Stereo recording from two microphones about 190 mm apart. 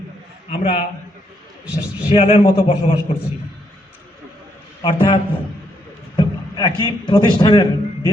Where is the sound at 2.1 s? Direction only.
30° left (ahead or behind).